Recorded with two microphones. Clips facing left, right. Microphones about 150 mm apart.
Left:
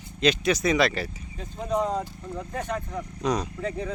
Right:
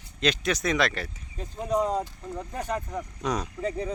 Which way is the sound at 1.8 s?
10° right (ahead or behind).